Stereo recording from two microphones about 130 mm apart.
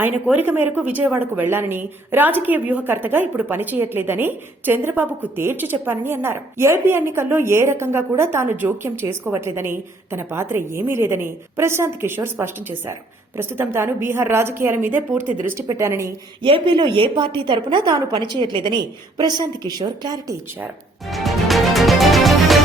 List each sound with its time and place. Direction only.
0.0 s a woman's voice: 15° right (ahead or behind)
16.4 s a woman's voice: 40° right (ahead or behind)
21.1 s music: centre (ahead or behind)